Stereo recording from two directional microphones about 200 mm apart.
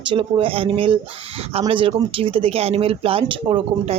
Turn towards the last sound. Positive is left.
turn(degrees=-25)  # may be behind; listen again after turning